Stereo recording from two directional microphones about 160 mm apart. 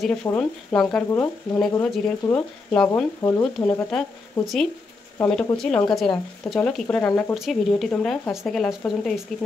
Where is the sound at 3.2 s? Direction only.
20° left (ahead or behind).